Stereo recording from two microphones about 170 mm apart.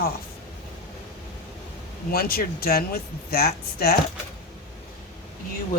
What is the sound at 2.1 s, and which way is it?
Speech, 60° left (ahead or behind).